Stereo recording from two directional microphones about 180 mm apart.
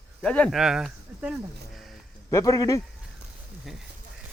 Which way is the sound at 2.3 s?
20° left (ahead or behind).